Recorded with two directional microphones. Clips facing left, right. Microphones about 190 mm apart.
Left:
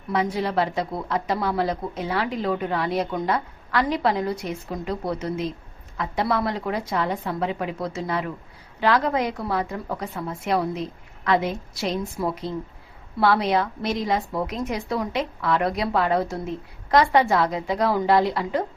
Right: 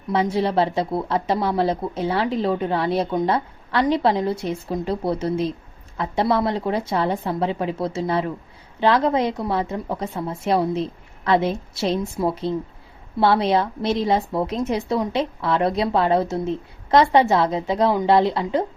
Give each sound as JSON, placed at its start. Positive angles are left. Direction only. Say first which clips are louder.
{"t": 0.1, "sound": "speech", "louder": "right 3 dB", "side_deg": -25}